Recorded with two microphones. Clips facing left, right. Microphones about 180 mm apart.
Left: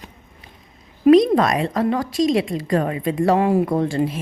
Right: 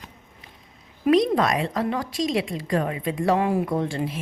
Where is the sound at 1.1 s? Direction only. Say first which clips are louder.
Left 6 dB; 40° left (ahead or behind).